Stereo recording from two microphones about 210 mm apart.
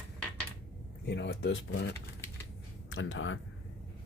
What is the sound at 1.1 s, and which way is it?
Speech, 55° left (ahead or behind).